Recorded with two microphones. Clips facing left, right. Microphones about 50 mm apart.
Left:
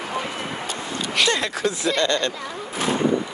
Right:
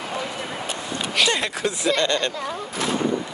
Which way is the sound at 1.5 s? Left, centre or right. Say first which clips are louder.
Even; centre.